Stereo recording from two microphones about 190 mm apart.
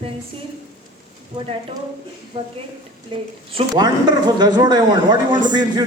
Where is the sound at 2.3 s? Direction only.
30° right (ahead or behind).